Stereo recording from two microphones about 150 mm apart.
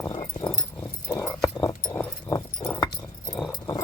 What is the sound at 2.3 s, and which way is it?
Keys jangling, 25° left (ahead or behind).